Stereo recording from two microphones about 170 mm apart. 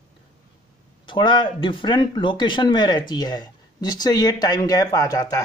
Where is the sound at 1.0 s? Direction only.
25° left (ahead or behind).